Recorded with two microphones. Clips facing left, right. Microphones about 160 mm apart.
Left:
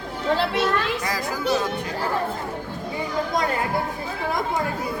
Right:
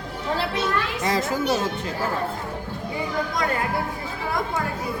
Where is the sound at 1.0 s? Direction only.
25° right (ahead or behind).